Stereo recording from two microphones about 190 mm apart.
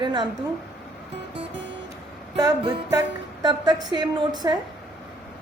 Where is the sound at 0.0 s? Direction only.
25° right (ahead or behind).